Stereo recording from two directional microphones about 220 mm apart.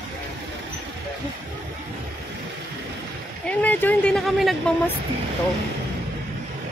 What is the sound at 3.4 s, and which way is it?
Vehicle, 5° left (ahead or behind).